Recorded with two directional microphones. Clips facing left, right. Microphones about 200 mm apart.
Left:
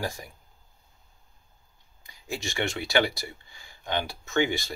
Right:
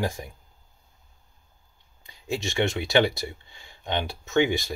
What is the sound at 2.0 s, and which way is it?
Speech, 25° right (ahead or behind).